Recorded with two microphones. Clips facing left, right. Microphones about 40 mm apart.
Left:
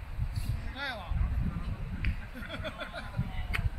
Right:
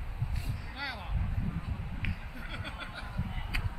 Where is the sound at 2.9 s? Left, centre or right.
Left.